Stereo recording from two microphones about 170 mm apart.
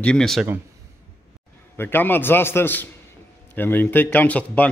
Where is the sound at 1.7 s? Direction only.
10° left (ahead or behind).